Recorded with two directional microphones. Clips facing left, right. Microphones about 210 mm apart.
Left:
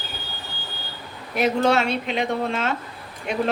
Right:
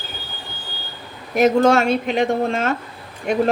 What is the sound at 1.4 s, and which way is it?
Speech, 45° right (ahead or behind).